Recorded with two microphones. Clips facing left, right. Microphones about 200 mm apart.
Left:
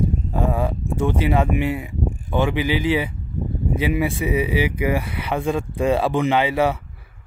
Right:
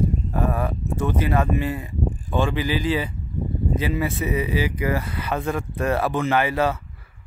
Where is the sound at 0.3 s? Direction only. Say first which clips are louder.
Left 2 dB; 15° left (ahead or behind).